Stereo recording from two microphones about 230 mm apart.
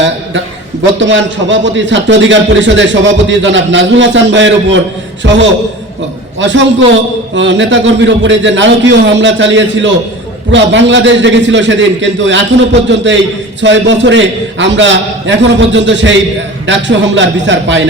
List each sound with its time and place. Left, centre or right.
0.0 s a man's voice: right